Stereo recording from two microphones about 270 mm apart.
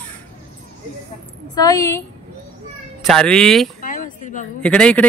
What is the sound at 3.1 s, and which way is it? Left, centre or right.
Speech, centre.